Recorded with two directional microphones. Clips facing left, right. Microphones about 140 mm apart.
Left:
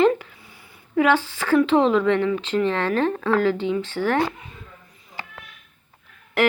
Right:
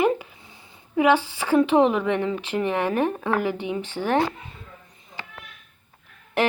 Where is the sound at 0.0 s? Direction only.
15° right (ahead or behind).